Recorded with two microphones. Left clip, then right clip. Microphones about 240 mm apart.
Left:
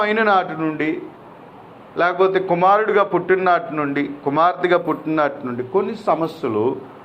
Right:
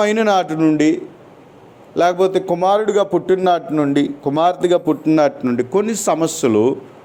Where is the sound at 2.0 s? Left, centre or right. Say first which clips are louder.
Right 2 dB; right.